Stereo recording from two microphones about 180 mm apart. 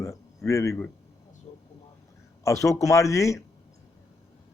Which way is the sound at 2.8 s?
20° left (ahead or behind).